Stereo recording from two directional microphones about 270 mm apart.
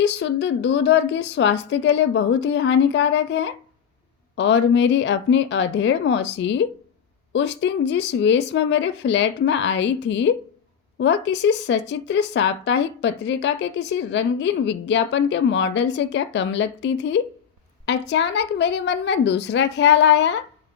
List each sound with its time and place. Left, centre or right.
0.0 s speech: left